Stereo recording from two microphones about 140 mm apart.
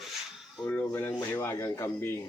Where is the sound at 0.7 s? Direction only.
15° left (ahead or behind).